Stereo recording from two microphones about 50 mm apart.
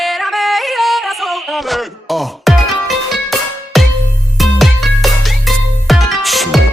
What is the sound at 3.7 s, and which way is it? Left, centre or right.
Music, centre.